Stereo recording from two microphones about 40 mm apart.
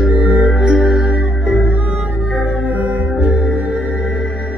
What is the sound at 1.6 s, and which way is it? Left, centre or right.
Music, right.